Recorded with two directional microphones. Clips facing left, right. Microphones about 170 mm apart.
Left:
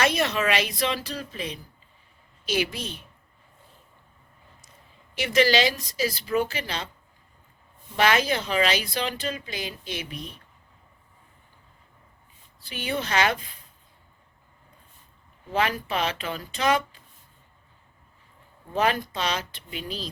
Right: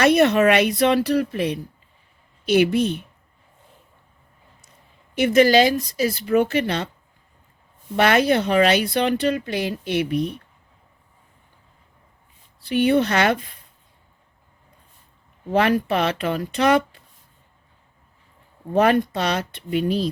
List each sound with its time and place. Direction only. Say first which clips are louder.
0.0 s speech: right 9 dB; 60° right (ahead or behind)
5.1 s speech: right 7 dB; 55° right (ahead or behind)
7.9 s speech: right 6 dB; 55° right (ahead or behind)
12.5 s speech: right 13 dB; 60° right (ahead or behind)
15.4 s speech: right 8 dB; 60° right (ahead or behind)
18.7 s speech: right 8 dB; 60° right (ahead or behind)